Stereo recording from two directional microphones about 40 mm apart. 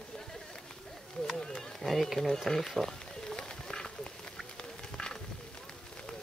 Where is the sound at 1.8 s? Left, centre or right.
Centre.